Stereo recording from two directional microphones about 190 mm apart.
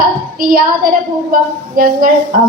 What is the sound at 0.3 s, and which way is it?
Female singing, 50° right (ahead or behind).